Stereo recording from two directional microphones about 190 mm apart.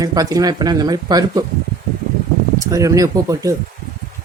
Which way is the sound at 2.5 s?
15° right (ahead or behind).